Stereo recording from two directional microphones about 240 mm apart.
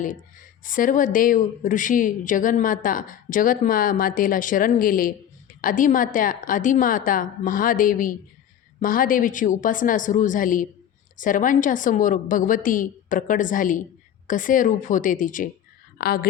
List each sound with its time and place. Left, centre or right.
0.6 s speech: left